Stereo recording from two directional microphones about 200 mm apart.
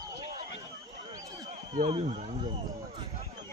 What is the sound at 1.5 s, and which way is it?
Speech, 35° right (ahead or behind).